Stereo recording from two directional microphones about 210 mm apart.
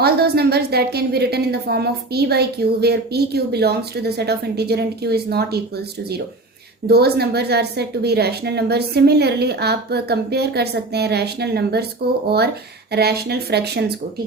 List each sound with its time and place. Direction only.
0.0 s a woman's voice: 50° right (ahead or behind)
12.9 s a woman's voice: 50° right (ahead or behind)